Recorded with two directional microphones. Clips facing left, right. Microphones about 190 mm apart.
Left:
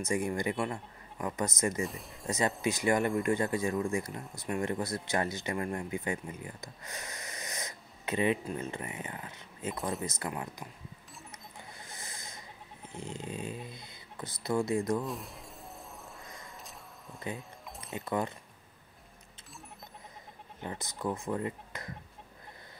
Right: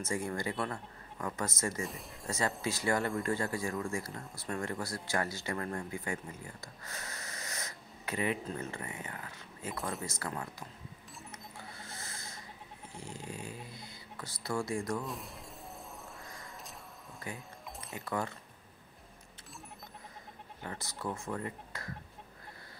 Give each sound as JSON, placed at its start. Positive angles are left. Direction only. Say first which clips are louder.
{"t": 0.0, "sound": "speech", "louder": "left 4 dB", "side_deg": 15}
{"t": 1.8, "sound": "speech", "louder": "left 4 dB", "side_deg": 0}
{"t": 2.2, "sound": "speech", "louder": "left 4 dB", "side_deg": 20}
{"t": 11.5, "sound": "a sound", "louder": "right 1 dB", "side_deg": 15}
{"t": 12.9, "sound": "speech", "louder": "left 5 dB", "side_deg": 20}
{"t": 15.0, "sound": "speech", "louder": "left 3 dB", "side_deg": 0}
{"t": 17.4, "sound": "music", "louder": "left 1 dB", "side_deg": 0}
{"t": 17.9, "sound": "speech", "louder": "left 4 dB", "side_deg": 20}
{"t": 20.6, "sound": "speech", "louder": "left 4 dB", "side_deg": 20}